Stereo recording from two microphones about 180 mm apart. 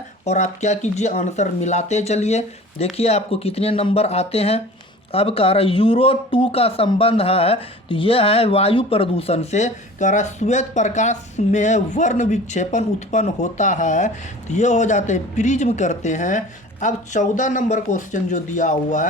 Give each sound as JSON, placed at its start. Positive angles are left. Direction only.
{"t": 0.3, "sound": "speech", "side_deg": 40}